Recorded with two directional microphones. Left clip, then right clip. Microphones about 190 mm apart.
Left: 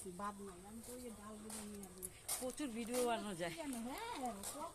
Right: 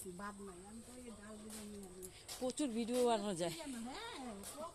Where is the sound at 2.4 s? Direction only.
40° right (ahead or behind).